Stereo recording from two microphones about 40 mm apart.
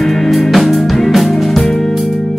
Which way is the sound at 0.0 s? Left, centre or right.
Centre.